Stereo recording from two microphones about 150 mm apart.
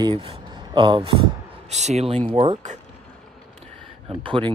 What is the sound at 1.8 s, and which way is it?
Speech, 45° right (ahead or behind).